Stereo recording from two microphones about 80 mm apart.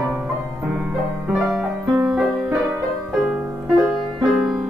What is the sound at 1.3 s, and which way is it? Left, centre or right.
Music, centre.